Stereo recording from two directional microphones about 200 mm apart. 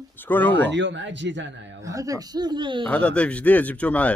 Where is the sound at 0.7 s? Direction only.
60° right (ahead or behind).